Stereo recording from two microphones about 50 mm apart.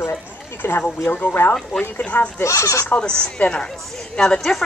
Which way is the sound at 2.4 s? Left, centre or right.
Left.